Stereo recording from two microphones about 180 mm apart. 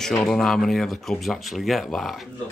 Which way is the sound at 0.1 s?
5° left (ahead or behind).